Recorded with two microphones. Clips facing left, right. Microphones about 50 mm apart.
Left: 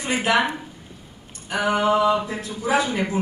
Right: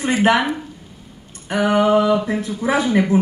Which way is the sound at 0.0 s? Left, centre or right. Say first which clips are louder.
Right 5 dB; right.